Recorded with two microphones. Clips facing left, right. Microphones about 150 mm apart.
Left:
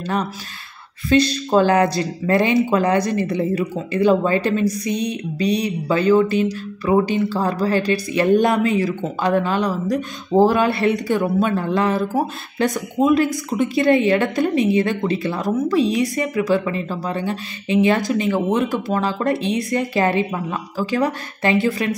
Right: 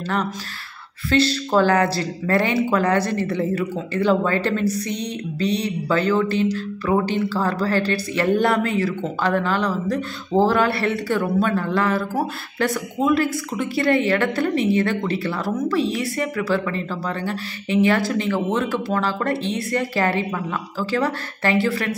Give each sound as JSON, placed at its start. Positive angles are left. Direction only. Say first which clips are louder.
{"t": 0.0, "sound": "speech", "louder": "left 1 dB", "side_deg": 15}